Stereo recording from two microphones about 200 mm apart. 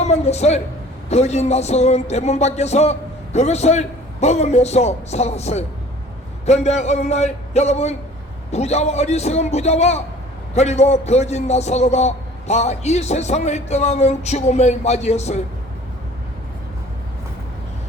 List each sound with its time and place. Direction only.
0.0 s a woman's voice: 35° left (ahead or behind)